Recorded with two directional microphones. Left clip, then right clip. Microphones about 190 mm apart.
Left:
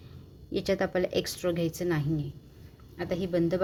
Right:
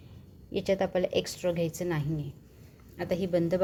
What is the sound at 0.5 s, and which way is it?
A woman's voice, 5° left (ahead or behind).